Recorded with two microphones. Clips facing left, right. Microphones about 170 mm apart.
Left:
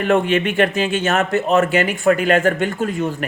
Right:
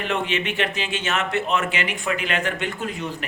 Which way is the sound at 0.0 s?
50° left (ahead or behind).